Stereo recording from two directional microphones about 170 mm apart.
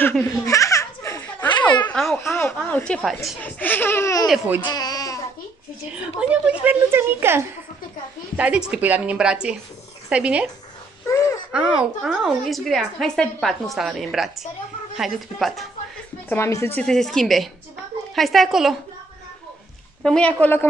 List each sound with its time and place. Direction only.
0.2 s baby laughter: 20° left (ahead or behind)
1.9 s a sound: 5° left (ahead or behind)
2.1 s speech: 15° left (ahead or behind)
4.3 s a woman's voice: 10° right (ahead or behind)
4.6 s baby cry: 25° left (ahead or behind)
5.9 s a woman's voice: 5° right (ahead or behind)
11.1 s wail: 20° left (ahead or behind)
11.5 s a woman's voice: 5° right (ahead or behind)
16.3 s a woman's voice: 15° left (ahead or behind); by 18.8 s centre (ahead or behind)
20.0 s speech: 5° left (ahead or behind)